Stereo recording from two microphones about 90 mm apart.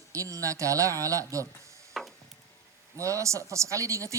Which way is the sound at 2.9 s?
35° right (ahead or behind).